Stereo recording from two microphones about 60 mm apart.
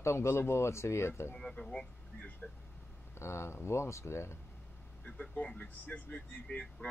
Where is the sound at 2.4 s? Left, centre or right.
Centre.